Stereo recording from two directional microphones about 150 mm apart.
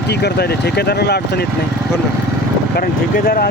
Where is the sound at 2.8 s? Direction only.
80° left.